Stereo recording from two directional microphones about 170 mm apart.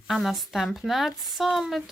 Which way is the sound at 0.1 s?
Centre (ahead or behind).